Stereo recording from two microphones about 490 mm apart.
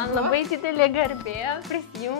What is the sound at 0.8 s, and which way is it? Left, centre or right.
Speech, left.